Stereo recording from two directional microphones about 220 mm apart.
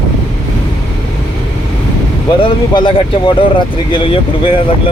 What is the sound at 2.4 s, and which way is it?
Speech, 20° left (ahead or behind).